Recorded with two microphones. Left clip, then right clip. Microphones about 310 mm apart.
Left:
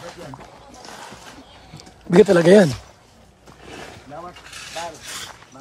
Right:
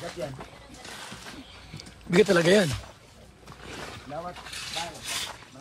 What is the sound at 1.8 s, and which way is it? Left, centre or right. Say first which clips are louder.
Speech: left 8 dB; centre.